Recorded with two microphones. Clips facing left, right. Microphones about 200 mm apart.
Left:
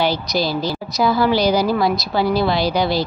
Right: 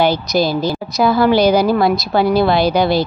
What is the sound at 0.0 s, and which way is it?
A woman's voice, 50° right (ahead or behind).